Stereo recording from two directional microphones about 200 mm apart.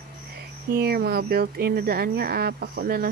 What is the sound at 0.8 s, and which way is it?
Speech, 50° right (ahead or behind).